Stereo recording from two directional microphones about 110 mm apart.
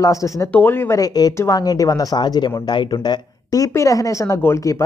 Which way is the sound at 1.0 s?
35° left (ahead or behind).